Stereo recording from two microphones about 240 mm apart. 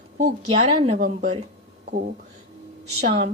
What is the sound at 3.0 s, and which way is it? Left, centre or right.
Speech, right.